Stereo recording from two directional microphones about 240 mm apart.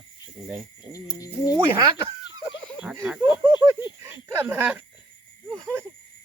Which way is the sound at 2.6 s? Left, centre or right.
Centre.